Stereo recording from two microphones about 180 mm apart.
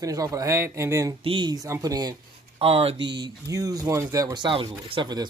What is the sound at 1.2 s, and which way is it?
Speech, 25° right (ahead or behind).